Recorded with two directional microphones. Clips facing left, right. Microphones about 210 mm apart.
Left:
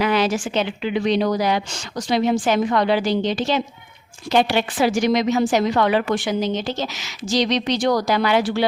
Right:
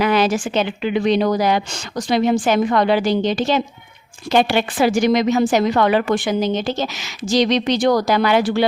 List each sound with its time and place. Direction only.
0.0 s a woman's voice: 45° right (ahead or behind)